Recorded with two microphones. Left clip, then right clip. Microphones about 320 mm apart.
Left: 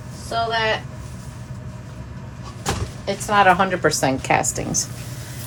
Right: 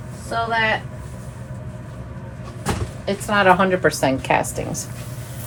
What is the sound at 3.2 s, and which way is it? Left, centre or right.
Speech, left.